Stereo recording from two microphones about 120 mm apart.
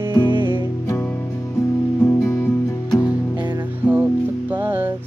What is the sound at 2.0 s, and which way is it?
Music, 20° left (ahead or behind).